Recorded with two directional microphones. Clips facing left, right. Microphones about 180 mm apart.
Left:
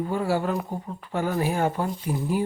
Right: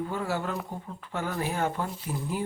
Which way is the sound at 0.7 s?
10° left (ahead or behind).